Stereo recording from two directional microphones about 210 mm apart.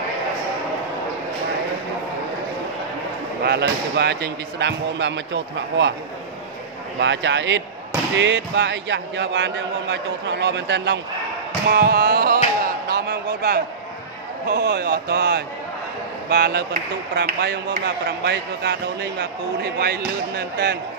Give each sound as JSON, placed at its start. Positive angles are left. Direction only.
{"t": 3.4, "sound": "a man's voice", "side_deg": -50}
{"t": 7.0, "sound": "a man's voice", "side_deg": -60}
{"t": 12.6, "sound": "a sound", "side_deg": -50}
{"t": 14.5, "sound": "speech", "side_deg": -50}